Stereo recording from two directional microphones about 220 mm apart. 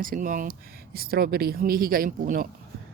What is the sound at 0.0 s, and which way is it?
Speech, 40° right (ahead or behind).